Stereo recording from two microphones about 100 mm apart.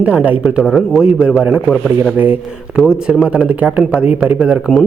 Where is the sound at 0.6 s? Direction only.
Centre (ahead or behind).